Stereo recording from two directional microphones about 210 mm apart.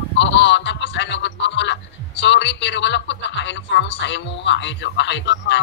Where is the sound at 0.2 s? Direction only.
55° left (ahead or behind).